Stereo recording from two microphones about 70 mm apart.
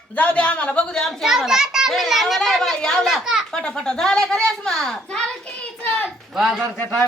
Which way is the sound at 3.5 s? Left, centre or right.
Centre.